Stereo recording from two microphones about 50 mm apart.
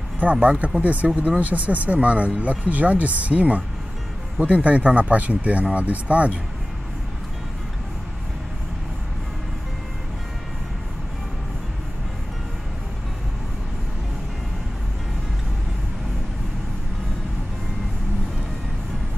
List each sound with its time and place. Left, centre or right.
0.2 s speech: right